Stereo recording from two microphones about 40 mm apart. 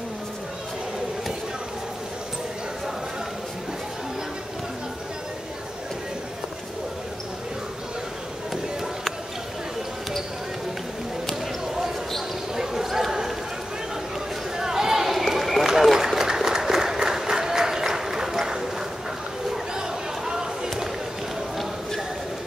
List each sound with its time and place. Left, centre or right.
12.5 s basketball bounce: centre
14.6 s run: centre
19.7 s a sound: centre